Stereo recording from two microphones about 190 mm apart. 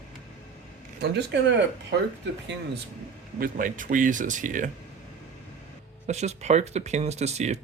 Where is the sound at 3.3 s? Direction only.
45° right (ahead or behind).